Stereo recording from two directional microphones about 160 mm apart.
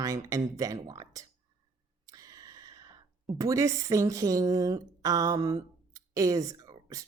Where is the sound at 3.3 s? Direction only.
20° right (ahead or behind).